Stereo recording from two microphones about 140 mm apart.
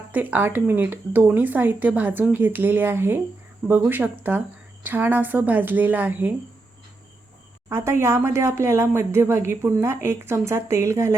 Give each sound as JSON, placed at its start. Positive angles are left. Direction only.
{"t": 0.1, "sound": "speech", "side_deg": -10}
{"t": 7.7, "sound": "speech", "side_deg": -20}